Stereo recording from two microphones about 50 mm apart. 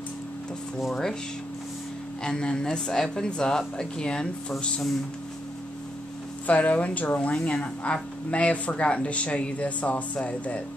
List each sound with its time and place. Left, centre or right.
2.2 s speech: centre
6.4 s speech: left